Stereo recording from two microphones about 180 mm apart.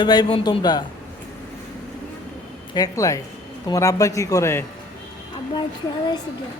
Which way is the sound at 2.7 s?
20° left (ahead or behind).